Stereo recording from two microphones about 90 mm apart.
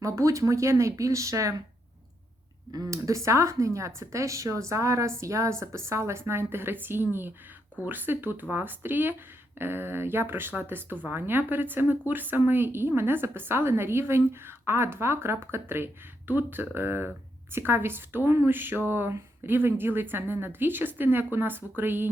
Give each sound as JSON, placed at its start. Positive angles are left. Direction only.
{"t": 0.0, "sound": "speech", "side_deg": -35}
{"t": 2.7, "sound": "speech", "side_deg": -40}